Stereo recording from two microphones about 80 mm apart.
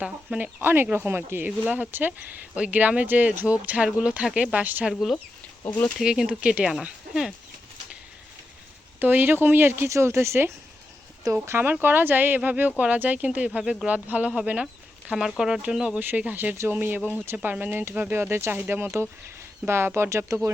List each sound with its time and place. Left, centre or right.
0.0 s speech: centre
0.6 s speech: right
4.9 s speech: centre
9.0 s speech: right
13.6 s speech: centre
13.8 s speech: centre
16.0 s speech: right